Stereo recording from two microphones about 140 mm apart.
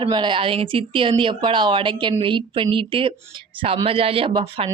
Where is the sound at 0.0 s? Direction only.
35° right (ahead or behind).